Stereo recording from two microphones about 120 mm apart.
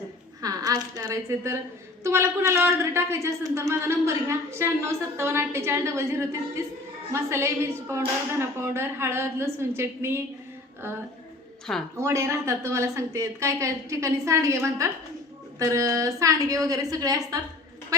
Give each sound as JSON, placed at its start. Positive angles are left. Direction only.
{"t": 0.4, "sound": "a woman's voice", "side_deg": -30}
{"t": 11.9, "sound": "a man's voice", "side_deg": -25}